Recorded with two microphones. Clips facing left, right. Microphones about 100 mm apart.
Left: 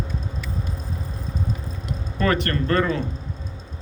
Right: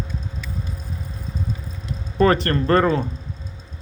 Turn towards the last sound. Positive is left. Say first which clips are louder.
# right 4 dB
turn(degrees=-40)  # may be behind; listen again after turning